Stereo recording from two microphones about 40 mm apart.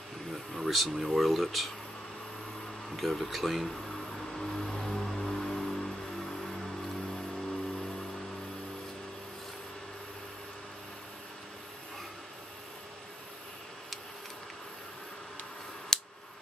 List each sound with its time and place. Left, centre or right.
0.6 s speech: centre
3.0 s speech: centre
4.3 s music: centre
15.9 s scissors: centre